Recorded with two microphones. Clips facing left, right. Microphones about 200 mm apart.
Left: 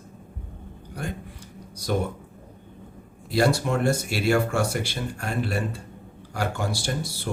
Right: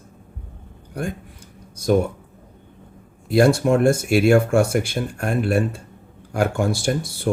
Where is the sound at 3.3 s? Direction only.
50° right (ahead or behind).